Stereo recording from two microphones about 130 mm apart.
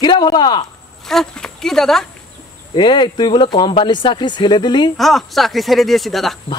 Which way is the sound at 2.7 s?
35° left (ahead or behind).